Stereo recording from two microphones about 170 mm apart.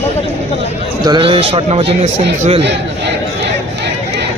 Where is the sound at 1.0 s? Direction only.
30° right (ahead or behind).